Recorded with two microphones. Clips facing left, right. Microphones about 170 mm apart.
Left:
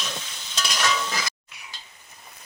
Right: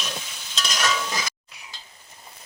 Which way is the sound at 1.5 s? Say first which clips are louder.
Even; 35° right (ahead or behind).